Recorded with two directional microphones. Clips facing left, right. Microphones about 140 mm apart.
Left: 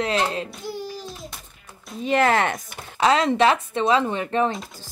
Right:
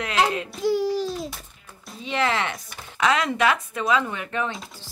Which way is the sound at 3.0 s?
30° left (ahead or behind).